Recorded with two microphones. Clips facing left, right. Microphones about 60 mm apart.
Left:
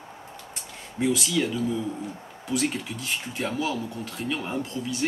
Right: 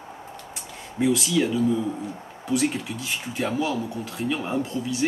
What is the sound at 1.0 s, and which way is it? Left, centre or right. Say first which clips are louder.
Speech: right 3 dB; centre.